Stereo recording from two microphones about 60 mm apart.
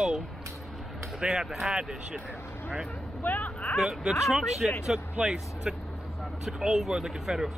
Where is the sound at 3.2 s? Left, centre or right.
Left.